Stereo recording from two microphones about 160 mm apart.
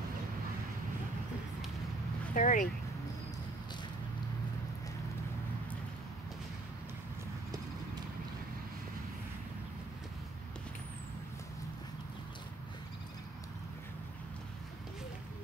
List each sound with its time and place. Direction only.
2.3 s speech: 55° left (ahead or behind)